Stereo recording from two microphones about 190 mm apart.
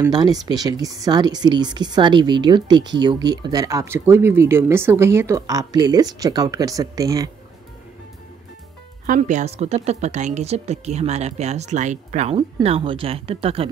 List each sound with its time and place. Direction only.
0.0 s speech: 20° right (ahead or behind)
9.0 s speech: 40° right (ahead or behind)